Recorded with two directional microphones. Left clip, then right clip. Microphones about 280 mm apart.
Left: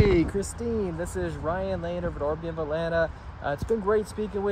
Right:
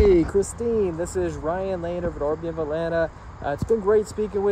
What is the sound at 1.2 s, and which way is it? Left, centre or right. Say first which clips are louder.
Speech: right 3 dB; centre.